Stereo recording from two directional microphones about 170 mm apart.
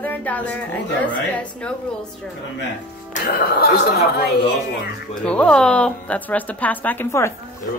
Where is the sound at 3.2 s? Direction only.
60° left (ahead or behind).